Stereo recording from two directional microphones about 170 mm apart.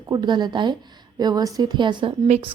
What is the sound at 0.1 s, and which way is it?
A woman's voice, 25° right (ahead or behind).